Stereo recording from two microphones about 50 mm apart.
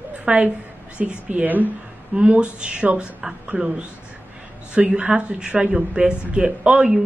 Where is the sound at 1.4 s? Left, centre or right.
Right.